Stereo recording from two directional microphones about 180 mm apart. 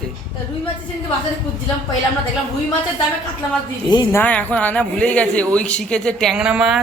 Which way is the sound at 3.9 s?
10° left (ahead or behind).